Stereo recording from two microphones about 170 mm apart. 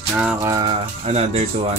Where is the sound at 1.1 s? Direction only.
40° right (ahead or behind).